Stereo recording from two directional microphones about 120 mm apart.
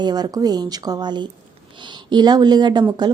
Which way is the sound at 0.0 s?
35° right (ahead or behind).